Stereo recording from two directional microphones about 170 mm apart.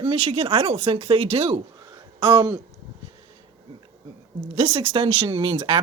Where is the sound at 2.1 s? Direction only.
25° right (ahead or behind).